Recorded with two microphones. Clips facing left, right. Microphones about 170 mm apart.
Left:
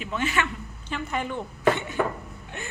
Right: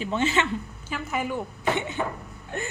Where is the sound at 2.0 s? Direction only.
60° left (ahead or behind).